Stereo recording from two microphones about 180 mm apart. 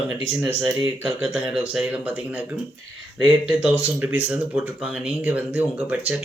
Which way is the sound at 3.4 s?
5° right (ahead or behind).